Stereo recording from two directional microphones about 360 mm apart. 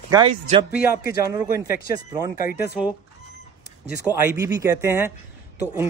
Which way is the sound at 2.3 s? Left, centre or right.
Left.